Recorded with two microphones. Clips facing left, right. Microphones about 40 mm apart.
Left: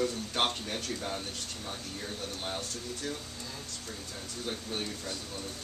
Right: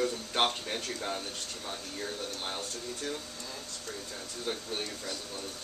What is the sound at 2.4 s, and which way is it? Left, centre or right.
Speech, centre.